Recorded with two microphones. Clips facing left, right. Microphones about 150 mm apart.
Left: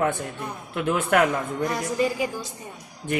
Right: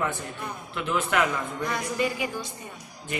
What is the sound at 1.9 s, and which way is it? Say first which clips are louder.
Speech: left 4 dB; 35° left (ahead or behind).